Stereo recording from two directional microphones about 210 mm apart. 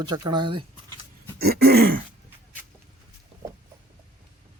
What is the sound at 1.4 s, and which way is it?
Throat clearing, 50° right (ahead or behind).